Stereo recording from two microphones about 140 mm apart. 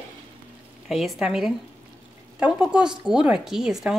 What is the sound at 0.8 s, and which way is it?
A woman's voice, centre (ahead or behind).